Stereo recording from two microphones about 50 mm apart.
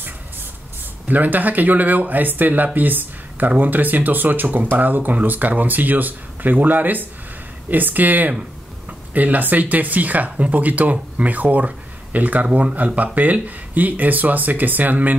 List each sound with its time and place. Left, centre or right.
1.0 s speech: right